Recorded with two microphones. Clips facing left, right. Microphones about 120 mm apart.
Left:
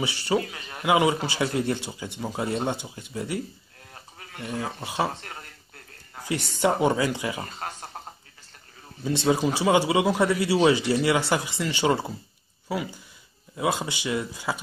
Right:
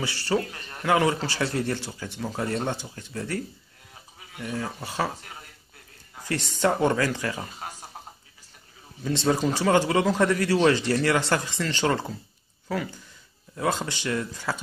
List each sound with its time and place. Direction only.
0.0 s a man's voice: 15° left (ahead or behind)
0.4 s a man's voice: 5° left (ahead or behind)
4.2 s bleat: 5° right (ahead or behind)
4.5 s a man's voice: 15° left (ahead or behind)
5.1 s speech: 5° right (ahead or behind)
6.1 s a man's voice: 10° left (ahead or behind)
7.4 s a sound: 5° right (ahead or behind)
9.0 s a man's voice: 15° left (ahead or behind)